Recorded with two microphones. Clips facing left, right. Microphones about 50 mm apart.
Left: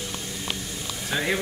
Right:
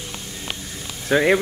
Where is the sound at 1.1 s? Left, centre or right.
Right.